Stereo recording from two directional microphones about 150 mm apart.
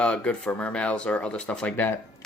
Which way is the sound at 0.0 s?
5° left (ahead or behind).